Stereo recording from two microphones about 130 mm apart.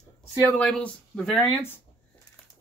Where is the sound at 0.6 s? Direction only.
5° left (ahead or behind).